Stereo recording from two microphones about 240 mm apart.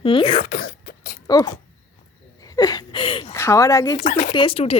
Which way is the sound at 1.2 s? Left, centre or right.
Centre.